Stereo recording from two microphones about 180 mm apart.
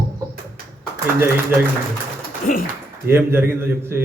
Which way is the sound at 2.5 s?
50° left (ahead or behind).